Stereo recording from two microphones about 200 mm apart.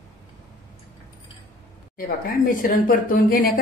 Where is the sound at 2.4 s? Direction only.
45° left (ahead or behind).